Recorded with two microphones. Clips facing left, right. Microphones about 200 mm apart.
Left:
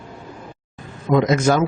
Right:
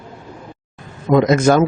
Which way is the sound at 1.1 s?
50° right (ahead or behind).